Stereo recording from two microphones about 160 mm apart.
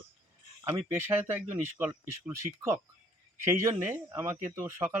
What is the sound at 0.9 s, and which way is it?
Speech, 15° right (ahead or behind).